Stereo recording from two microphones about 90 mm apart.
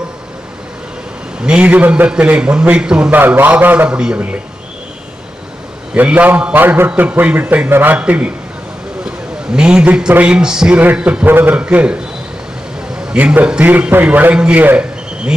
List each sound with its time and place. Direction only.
1.4 s a man's voice: 10° right (ahead or behind)
3.2 s a man's voice: 20° right (ahead or behind)
5.9 s a man's voice: 15° right (ahead or behind)
13.1 s a man's voice: 15° right (ahead or behind)